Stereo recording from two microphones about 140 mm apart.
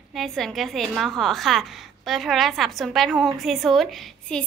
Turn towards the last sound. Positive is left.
turn(degrees=5)  # may be behind; listen again after turning